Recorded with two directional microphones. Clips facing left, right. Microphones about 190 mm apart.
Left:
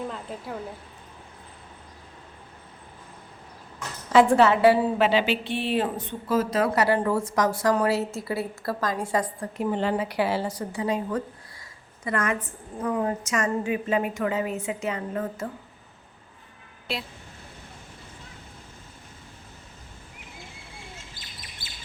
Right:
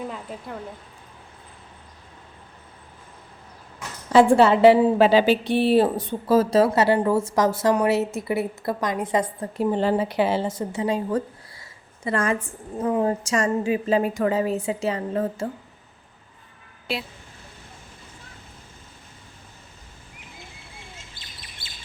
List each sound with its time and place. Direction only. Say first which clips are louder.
0.1 s speech: right 1 dB; centre (ahead or behind)
4.1 s a woman's voice: right 3 dB; 30° right (ahead or behind)
4.9 s a woman's voice: right 6 dB; 40° right (ahead or behind)
9.7 s a woman's voice: right 4 dB; 35° right (ahead or behind)
10.1 s a woman's voice: right 3 dB; 20° right (ahead or behind)